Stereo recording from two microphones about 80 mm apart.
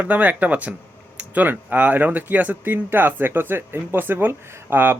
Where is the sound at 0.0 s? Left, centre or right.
Right.